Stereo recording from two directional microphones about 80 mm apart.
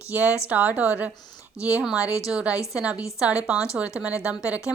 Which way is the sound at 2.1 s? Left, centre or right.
Left.